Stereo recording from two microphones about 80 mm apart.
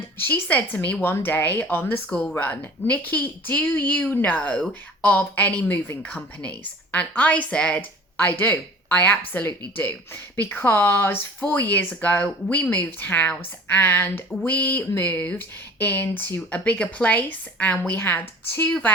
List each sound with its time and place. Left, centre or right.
0.2 s a woman's voice: left